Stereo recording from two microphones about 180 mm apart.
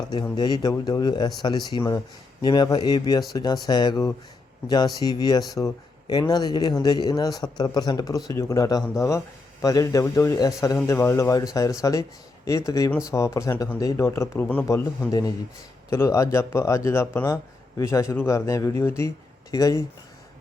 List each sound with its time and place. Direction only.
0.1 s speech: 25° left (ahead or behind)